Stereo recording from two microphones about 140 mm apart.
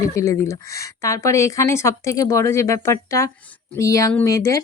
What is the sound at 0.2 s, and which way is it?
Speech, 20° left (ahead or behind).